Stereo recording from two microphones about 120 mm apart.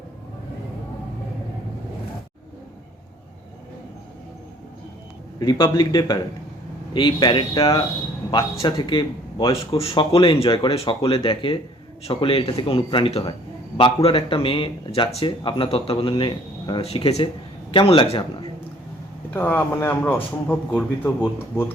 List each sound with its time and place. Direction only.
5.4 s a man's voice: 40° left (ahead or behind)
16.8 s speech: 60° left (ahead or behind)
17.7 s a man's voice: 50° left (ahead or behind)
19.3 s speech: 15° left (ahead or behind)